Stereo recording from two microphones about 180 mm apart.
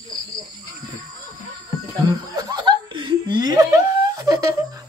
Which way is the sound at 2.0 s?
20° right (ahead or behind).